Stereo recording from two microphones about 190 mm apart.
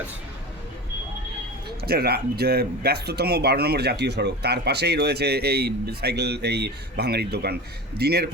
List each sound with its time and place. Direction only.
1.8 s speech: 55° right (ahead or behind)